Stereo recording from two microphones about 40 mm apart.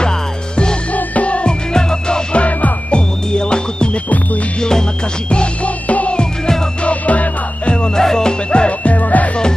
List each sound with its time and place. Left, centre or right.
0.0 s music: left
0.9 s music: left
1.5 s music: centre
2.3 s music: left
4.1 s music: left
4.6 s music: centre
5.3 s music: left